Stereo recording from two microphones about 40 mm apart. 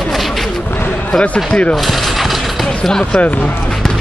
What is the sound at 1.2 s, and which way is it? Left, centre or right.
Speech, left.